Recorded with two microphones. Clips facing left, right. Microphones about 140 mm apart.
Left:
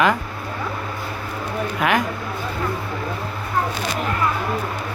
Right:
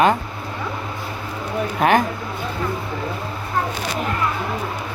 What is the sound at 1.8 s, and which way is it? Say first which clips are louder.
Speech: right 4 dB; 35° right (ahead or behind).